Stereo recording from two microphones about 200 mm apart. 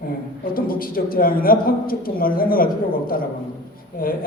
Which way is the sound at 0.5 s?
45° left (ahead or behind).